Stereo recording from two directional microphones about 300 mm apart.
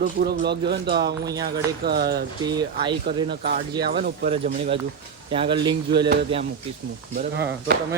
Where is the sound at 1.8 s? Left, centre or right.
Right.